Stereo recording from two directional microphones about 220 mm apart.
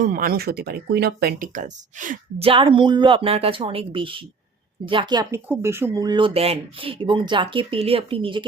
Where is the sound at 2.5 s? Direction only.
25° right (ahead or behind).